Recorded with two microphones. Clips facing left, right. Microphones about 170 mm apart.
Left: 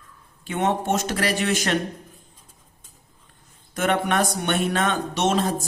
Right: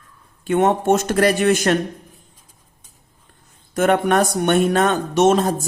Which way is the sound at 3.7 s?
45° right (ahead or behind).